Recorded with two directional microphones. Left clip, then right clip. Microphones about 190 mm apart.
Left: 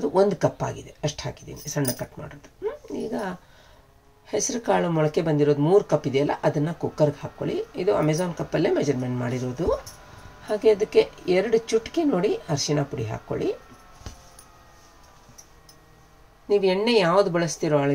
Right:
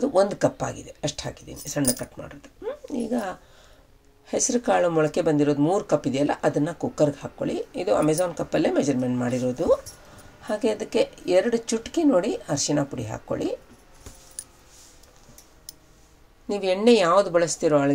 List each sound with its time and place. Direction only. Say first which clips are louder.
0.0 s a woman's voice: even; 30° right (ahead or behind)
16.4 s speech: right 1 dB; 35° right (ahead or behind)